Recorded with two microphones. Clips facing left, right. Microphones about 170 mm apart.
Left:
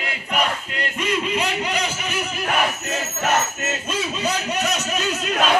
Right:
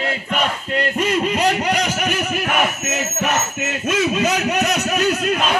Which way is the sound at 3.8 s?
70° right (ahead or behind).